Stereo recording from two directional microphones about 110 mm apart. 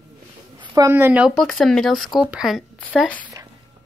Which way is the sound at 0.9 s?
20° right (ahead or behind).